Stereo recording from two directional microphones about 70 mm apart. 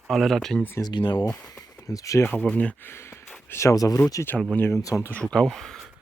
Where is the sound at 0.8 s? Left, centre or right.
Left.